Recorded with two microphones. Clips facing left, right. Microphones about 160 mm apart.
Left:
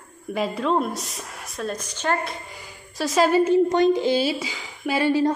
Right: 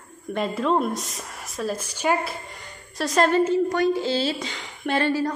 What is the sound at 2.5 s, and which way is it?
A woman's voice, centre (ahead or behind).